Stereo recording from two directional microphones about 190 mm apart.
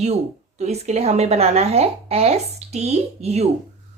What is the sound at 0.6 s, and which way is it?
Speech, 35° right (ahead or behind).